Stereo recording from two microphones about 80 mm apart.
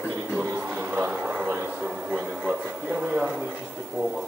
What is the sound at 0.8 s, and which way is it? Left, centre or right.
Speech, right.